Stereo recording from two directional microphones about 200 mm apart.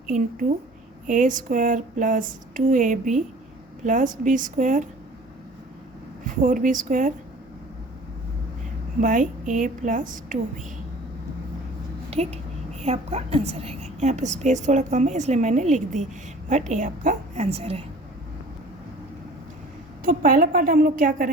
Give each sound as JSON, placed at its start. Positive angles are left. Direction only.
{"t": 0.1, "sound": "a woman's voice", "side_deg": -40}
{"t": 6.2, "sound": "a woman's voice", "side_deg": -40}
{"t": 9.0, "sound": "a woman's voice", "side_deg": -40}
{"t": 12.1, "sound": "a woman's voice", "side_deg": -30}
{"t": 20.1, "sound": "a woman's voice", "side_deg": -45}